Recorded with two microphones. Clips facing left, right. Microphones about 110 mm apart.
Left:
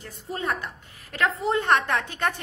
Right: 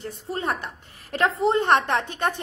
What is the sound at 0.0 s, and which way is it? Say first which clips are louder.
A woman's voice: right 2 dB; 30° right (ahead or behind).